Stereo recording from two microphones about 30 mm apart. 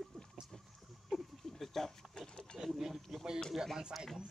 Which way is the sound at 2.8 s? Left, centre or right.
Centre.